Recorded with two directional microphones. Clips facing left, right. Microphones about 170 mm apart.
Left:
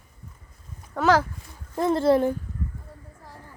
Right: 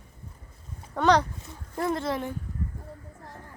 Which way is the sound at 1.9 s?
30° left (ahead or behind).